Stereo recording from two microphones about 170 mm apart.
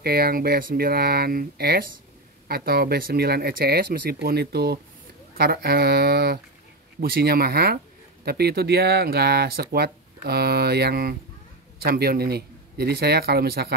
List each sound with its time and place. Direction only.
0.0 s speech: 65° right (ahead or behind)